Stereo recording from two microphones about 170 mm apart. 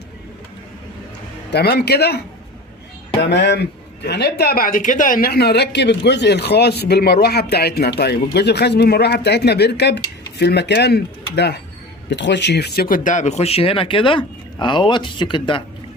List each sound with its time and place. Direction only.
1.5 s a man's voice: 75° left (ahead or behind)
12.0 s speech: 90° left; by 15.6 s 30° left (ahead or behind)